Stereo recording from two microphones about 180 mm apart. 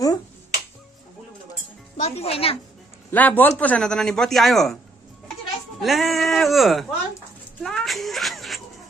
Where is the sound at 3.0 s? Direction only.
10° left (ahead or behind).